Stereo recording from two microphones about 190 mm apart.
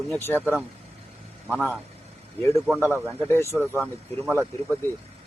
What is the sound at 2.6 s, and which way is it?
Speech, 5° right (ahead or behind).